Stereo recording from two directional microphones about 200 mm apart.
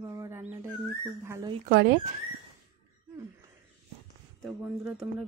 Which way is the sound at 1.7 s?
55° right (ahead or behind).